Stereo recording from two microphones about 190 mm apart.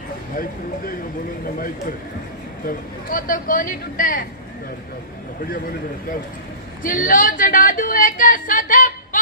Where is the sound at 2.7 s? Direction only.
45° left (ahead or behind).